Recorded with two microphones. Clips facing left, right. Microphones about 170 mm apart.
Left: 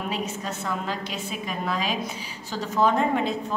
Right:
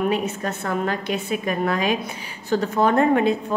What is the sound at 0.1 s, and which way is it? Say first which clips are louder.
A woman's voice: right 6 dB; 60° right (ahead or behind).